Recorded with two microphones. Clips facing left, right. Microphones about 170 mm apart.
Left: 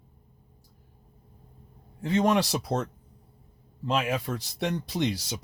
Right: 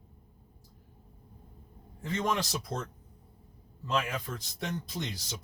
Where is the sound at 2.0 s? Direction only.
75° left (ahead or behind).